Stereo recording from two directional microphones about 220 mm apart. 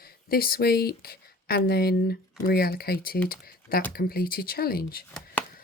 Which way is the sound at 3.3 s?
40° left (ahead or behind).